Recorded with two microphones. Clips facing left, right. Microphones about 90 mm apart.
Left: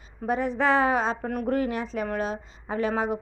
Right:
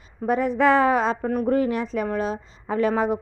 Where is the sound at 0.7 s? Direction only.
40° right (ahead or behind).